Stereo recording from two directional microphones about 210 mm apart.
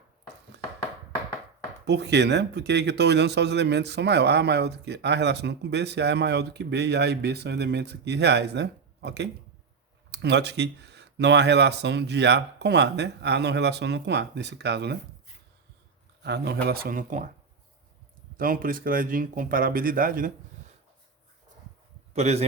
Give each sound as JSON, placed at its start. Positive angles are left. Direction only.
{"t": 1.8, "sound": "speech", "side_deg": -55}
{"t": 16.2, "sound": "speech", "side_deg": -50}
{"t": 18.3, "sound": "speech", "side_deg": -45}
{"t": 22.1, "sound": "a man's voice", "side_deg": -30}